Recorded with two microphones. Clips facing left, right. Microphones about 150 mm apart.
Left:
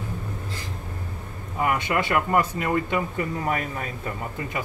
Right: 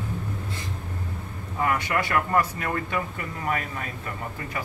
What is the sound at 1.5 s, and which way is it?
Speech, 20° left (ahead or behind).